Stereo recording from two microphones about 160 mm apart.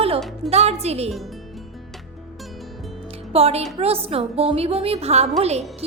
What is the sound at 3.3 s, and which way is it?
A woman's voice, 40° right (ahead or behind).